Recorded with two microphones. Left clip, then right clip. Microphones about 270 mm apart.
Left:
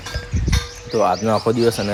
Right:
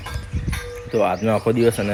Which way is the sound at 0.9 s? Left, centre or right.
Centre.